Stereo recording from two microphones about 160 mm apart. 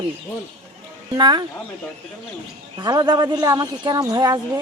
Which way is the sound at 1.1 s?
25° right (ahead or behind).